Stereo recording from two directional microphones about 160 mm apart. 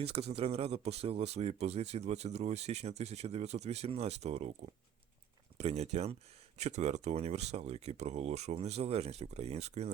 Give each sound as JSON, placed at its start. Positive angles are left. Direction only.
{"t": 0.0, "sound": "speech", "side_deg": -40}